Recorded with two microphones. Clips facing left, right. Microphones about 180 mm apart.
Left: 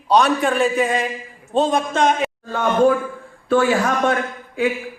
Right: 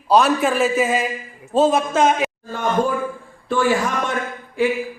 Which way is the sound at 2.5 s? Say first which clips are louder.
Left 5 dB; 70° left (ahead or behind).